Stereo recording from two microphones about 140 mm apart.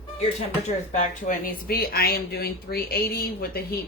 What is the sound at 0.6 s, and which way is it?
Speech, 60° left (ahead or behind).